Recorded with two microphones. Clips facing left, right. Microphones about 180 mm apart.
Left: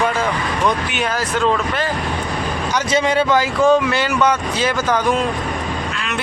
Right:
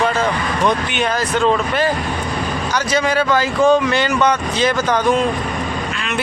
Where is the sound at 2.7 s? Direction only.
25° left (ahead or behind).